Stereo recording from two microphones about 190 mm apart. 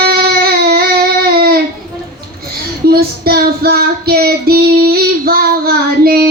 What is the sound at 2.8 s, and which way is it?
Child singing, 55° right (ahead or behind).